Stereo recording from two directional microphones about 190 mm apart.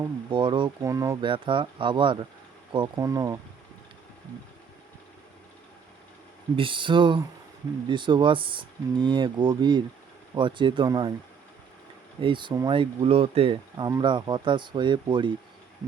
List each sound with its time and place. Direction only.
0.3 s speech: 25° right (ahead or behind)
1.2 s speech: 25° right (ahead or behind)
6.6 s speech: 25° right (ahead or behind)
12.2 s speech: 25° right (ahead or behind)